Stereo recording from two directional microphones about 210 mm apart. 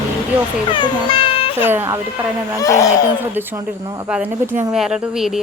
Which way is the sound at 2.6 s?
15° left (ahead or behind).